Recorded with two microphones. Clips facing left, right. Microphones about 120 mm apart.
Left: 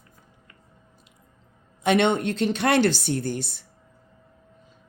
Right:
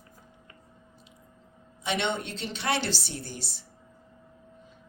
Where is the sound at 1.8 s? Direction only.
55° left (ahead or behind).